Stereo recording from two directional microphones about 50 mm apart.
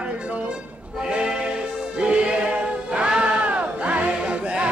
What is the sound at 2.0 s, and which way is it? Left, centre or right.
Music, centre.